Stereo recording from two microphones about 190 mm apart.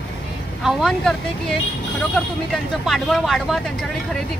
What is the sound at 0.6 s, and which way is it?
Speech, centre (ahead or behind).